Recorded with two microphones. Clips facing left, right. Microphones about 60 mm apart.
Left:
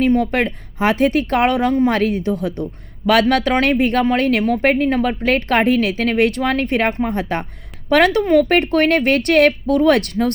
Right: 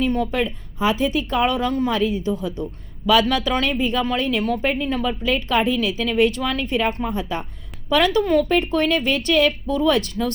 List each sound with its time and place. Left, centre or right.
0.3 s speech: left
1.6 s speech: left
1.9 s speech: left